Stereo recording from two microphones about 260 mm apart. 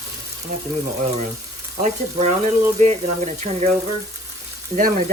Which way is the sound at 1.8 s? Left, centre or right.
Right.